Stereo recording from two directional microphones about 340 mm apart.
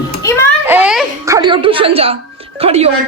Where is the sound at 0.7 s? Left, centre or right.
Centre.